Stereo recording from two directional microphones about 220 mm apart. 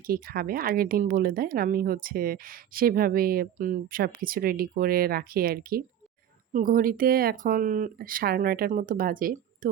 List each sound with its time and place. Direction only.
0.1 s speech: 40° right (ahead or behind)